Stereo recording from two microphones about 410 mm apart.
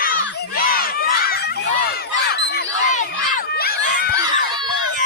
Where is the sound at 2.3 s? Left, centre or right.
Left.